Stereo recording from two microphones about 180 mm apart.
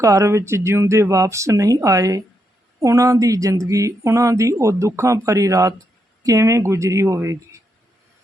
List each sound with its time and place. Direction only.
0.0 s speech: 15° right (ahead or behind)